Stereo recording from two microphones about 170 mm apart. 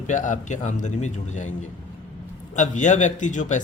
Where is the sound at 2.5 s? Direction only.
45° left (ahead or behind).